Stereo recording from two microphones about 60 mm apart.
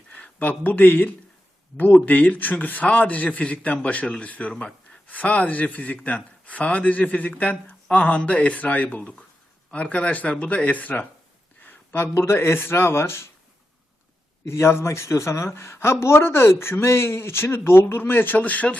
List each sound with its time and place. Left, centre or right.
0.1 s speech: left
11.6 s a sound: left
12.1 s a woman's voice: left
14.4 s a woman's voice: left